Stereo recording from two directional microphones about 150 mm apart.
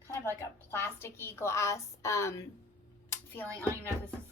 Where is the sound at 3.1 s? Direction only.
15° left (ahead or behind).